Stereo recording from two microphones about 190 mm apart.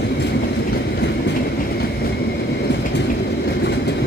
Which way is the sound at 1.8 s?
55° left (ahead or behind).